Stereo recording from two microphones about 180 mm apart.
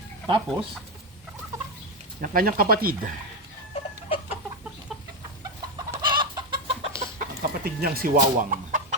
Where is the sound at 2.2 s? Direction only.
50° right (ahead or behind).